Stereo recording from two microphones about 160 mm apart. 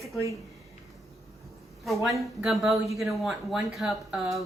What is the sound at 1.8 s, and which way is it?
A woman's voice, centre (ahead or behind).